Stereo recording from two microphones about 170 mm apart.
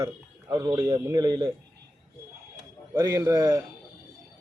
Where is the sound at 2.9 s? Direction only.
15° right (ahead or behind).